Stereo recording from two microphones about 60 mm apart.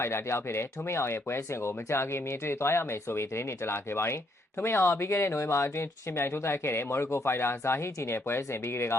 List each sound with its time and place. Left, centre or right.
0.0 s speech: left